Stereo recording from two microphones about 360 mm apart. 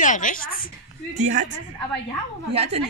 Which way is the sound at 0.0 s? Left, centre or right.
Left.